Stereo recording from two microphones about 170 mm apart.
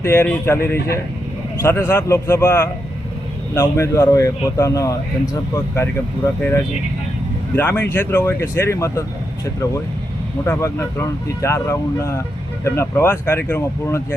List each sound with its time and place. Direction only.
0.0 s speech: 15° left (ahead or behind)
7.5 s speech: 10° left (ahead or behind)
10.4 s speech: 15° left (ahead or behind)